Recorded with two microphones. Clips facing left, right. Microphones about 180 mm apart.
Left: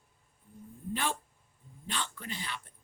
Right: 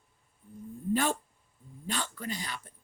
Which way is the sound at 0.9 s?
40° right (ahead or behind).